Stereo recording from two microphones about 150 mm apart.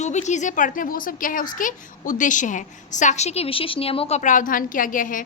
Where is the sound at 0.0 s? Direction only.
50° left (ahead or behind).